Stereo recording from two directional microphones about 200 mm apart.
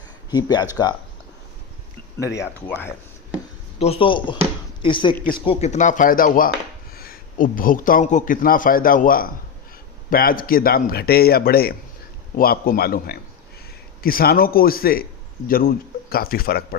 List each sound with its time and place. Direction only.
0.3 s speech: 20° left (ahead or behind)
2.1 s speech: 15° left (ahead or behind)
3.8 s a man's voice: 30° left (ahead or behind); by 16.6 s 50° left (ahead or behind)